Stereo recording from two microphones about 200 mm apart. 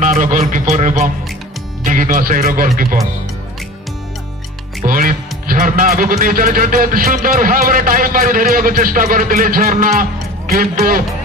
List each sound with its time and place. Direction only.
0.0 s speech: 40° right (ahead or behind)
4.8 s speech: 45° right (ahead or behind)